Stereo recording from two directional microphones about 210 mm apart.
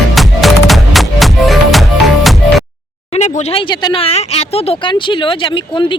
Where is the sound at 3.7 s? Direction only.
20° left (ahead or behind).